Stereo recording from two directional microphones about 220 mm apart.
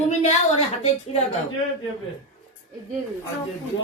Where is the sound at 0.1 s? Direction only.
30° left (ahead or behind).